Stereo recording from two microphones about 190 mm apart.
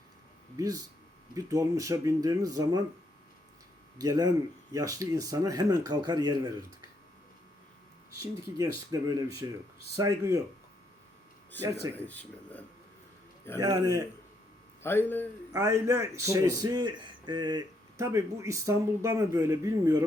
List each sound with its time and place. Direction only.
0.5 s a man's voice: 20° right (ahead or behind)
3.9 s speech: 20° right (ahead or behind)
8.2 s a man's voice: 15° right (ahead or behind)
11.9 s speech: 10° left (ahead or behind)
13.6 s speech: 20° right (ahead or behind)
14.8 s speech: 10° left (ahead or behind)
15.5 s a man's voice: 15° right (ahead or behind)